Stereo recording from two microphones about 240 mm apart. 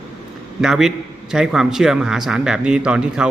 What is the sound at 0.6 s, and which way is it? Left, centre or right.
A man's voice, centre.